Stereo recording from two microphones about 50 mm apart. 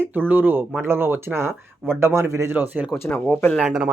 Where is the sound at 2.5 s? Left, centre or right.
Right.